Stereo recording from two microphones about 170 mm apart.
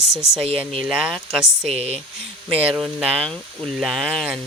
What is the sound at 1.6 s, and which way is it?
Speech, 35° right (ahead or behind).